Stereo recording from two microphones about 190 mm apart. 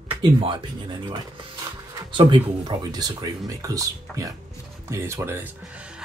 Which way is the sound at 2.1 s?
25° right (ahead or behind).